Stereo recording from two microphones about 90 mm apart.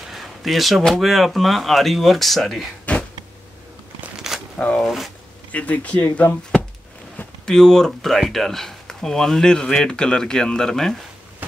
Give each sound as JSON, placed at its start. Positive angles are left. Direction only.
{"t": 0.1, "sound": "speech", "side_deg": 0}
{"t": 2.8, "sound": "a sound", "side_deg": 15}
{"t": 4.2, "sound": "a sound", "side_deg": -5}
{"t": 4.6, "sound": "speech", "side_deg": 15}
{"t": 4.8, "sound": "speech", "side_deg": 0}
{"t": 5.5, "sound": "speech", "side_deg": 15}